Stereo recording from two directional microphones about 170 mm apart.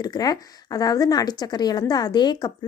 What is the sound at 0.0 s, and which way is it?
A woman's voice, 25° left (ahead or behind).